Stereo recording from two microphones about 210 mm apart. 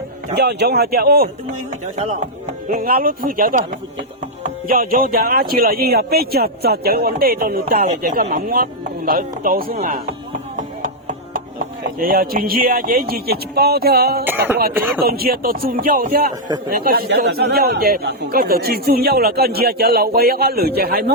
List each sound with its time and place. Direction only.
0.3 s speech: 50° right (ahead or behind)
2.6 s speech: 40° right (ahead or behind)
4.7 s speech: 40° right (ahead or behind)
11.6 s speech: 40° right (ahead or behind)
14.8 s speech: 10° right (ahead or behind)
15.0 s speech: 45° right (ahead or behind)